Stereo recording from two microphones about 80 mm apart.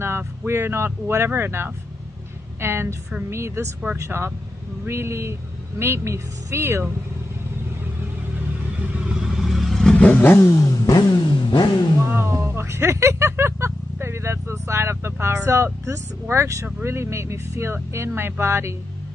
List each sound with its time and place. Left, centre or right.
0.5 s a woman's voice: right
9.1 s vehicle: centre
9.9 s vehicle: centre
10.3 s vehicle: left
11.0 s vehicle: left
12.1 s speech: right